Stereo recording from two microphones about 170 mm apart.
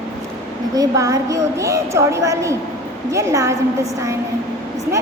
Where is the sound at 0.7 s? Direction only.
20° right (ahead or behind).